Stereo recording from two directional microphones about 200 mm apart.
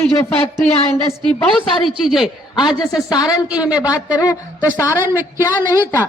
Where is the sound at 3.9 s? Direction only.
20° left (ahead or behind).